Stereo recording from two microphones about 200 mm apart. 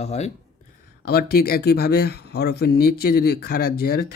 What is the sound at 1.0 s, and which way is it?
Speech, 50° left (ahead or behind).